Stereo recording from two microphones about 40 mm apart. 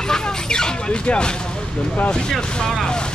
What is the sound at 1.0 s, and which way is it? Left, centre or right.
Speech, left.